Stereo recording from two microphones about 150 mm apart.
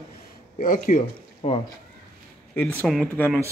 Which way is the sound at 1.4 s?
45° left (ahead or behind).